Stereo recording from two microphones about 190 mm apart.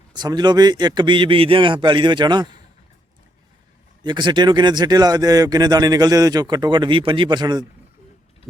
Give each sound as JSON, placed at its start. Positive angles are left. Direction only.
{"t": 0.1, "sound": "speech", "side_deg": -20}
{"t": 4.0, "sound": "speech", "side_deg": -25}